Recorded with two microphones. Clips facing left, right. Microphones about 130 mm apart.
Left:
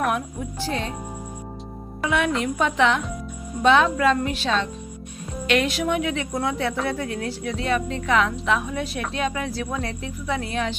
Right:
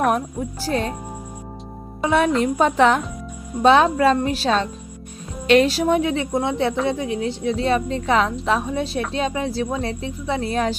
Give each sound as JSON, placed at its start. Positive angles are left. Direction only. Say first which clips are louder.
{"t": 0.6, "sound": "a woman's voice", "louder": "right 4 dB", "side_deg": -40}
{"t": 2.0, "sound": "a woman's voice", "louder": "right 5 dB", "side_deg": -35}